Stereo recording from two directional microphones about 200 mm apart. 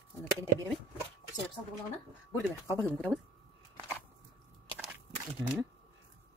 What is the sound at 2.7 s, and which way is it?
Speech, 10° left (ahead or behind).